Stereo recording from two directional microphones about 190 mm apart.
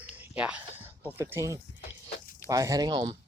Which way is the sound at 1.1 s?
10° right (ahead or behind).